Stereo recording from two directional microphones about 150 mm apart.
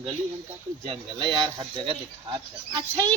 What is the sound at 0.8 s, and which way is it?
Speech, 35° right (ahead or behind).